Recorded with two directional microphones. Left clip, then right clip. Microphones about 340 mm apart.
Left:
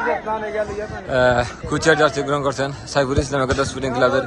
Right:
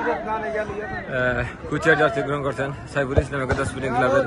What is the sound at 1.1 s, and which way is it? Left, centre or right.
A man's voice, centre.